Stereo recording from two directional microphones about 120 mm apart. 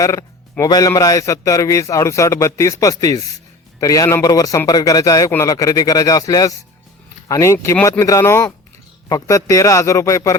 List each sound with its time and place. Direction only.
0.0 s a man's voice: 25° left (ahead or behind)